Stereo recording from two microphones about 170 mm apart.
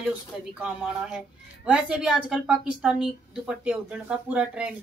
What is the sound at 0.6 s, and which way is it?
A woman's voice, 5° right (ahead or behind).